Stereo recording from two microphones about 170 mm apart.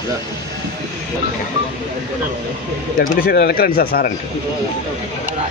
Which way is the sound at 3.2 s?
65° left (ahead or behind).